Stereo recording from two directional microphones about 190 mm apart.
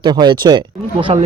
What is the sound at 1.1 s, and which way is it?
Speech, 30° right (ahead or behind).